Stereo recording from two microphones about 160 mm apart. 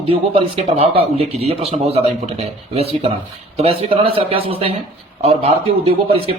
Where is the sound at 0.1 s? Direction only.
35° right (ahead or behind).